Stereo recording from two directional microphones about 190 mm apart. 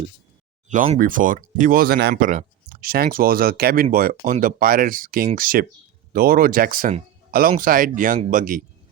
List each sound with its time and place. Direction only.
0.9 s speech: 45° right (ahead or behind)